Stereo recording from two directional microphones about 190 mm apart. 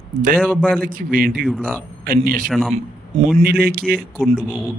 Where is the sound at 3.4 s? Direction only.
55° right (ahead or behind).